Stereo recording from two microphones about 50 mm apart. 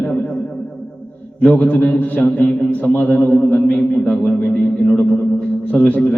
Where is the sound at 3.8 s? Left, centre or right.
Centre.